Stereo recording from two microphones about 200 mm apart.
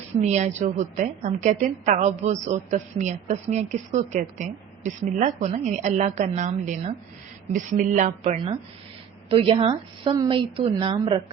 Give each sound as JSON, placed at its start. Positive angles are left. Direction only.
{"t": 0.2, "sound": "a woman's voice", "side_deg": -35}